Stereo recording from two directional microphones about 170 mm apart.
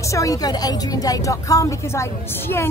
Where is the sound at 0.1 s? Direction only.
20° left (ahead or behind).